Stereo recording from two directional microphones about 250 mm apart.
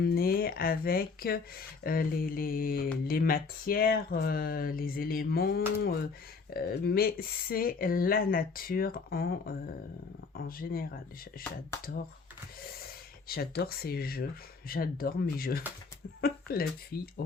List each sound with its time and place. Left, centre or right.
0.0 s speech: left